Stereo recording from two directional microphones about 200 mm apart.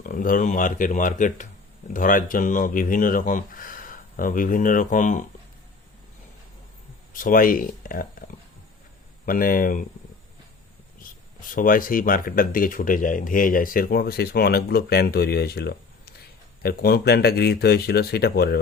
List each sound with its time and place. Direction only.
0.0 s speech: 45° left (ahead or behind)
7.1 s speech: 45° left (ahead or behind)
9.2 s speech: 45° left (ahead or behind)
11.5 s speech: 45° left (ahead or behind)